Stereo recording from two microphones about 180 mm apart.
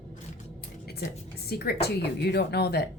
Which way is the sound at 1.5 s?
60° left (ahead or behind).